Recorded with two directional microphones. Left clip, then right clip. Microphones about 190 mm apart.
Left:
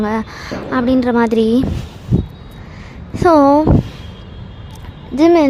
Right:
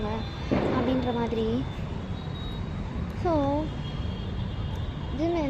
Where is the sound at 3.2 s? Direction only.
55° left (ahead or behind).